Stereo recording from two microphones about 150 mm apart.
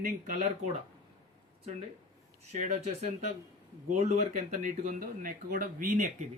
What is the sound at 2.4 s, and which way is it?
Speech, 50° right (ahead or behind).